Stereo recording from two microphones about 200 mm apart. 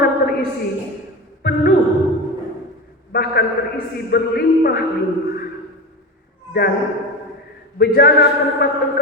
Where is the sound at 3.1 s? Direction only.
50° left (ahead or behind).